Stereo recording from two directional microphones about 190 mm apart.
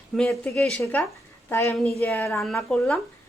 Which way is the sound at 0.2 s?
5° left (ahead or behind).